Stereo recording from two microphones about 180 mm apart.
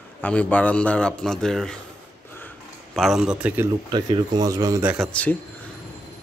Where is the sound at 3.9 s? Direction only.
25° right (ahead or behind).